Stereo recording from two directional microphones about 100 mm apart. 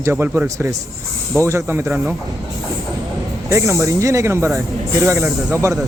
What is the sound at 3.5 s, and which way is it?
Speech, 30° right (ahead or behind).